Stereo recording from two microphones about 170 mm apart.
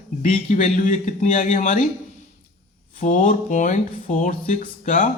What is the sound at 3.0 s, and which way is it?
Speech, 45° left (ahead or behind).